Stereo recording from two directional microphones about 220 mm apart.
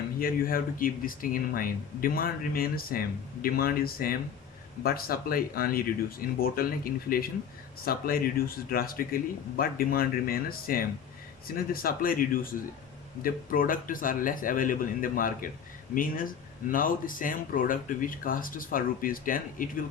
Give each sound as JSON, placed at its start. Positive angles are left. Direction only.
{"t": 0.2, "sound": "speech", "side_deg": 40}